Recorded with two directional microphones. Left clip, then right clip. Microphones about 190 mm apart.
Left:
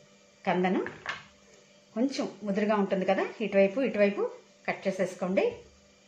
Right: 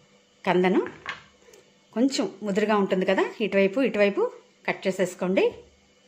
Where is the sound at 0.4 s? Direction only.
60° right (ahead or behind).